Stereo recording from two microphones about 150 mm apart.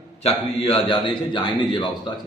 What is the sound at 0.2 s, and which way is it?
A man's voice, 40° left (ahead or behind).